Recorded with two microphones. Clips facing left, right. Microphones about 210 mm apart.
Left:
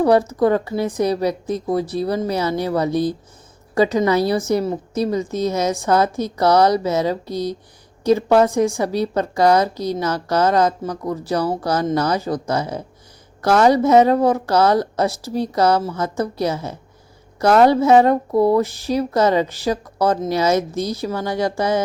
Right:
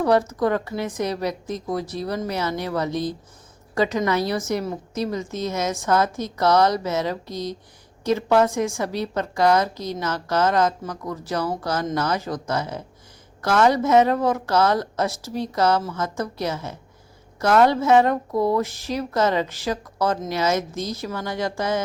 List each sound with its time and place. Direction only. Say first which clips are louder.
0.3 s a woman's voice: left 5 dB; 30° left (ahead or behind)